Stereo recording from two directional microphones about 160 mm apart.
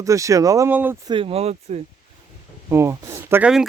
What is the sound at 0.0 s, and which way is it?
Speech, 20° right (ahead or behind).